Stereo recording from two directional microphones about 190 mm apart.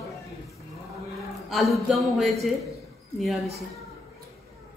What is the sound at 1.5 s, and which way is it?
Speech, centre (ahead or behind).